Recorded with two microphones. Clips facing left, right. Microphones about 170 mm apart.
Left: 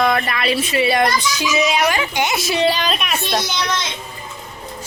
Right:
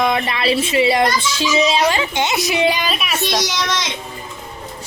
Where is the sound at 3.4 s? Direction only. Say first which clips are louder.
Right 1 dB; 90° right.